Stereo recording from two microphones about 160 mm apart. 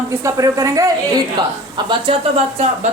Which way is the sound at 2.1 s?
35° right (ahead or behind).